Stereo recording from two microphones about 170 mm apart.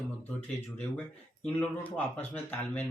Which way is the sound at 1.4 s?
10° left (ahead or behind).